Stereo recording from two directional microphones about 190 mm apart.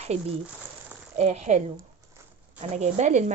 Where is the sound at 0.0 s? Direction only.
35° right (ahead or behind).